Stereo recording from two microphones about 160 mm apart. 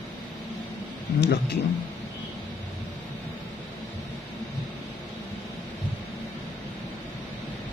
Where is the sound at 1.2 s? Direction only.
90° left.